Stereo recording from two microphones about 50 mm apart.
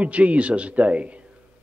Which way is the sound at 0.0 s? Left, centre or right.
Right.